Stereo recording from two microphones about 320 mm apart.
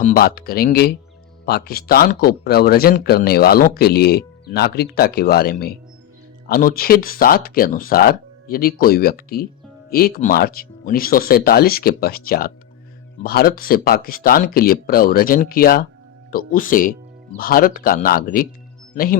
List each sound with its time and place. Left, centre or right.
0.0 s speech: left